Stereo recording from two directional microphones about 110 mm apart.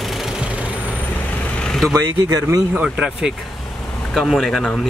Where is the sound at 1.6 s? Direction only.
5° left (ahead or behind).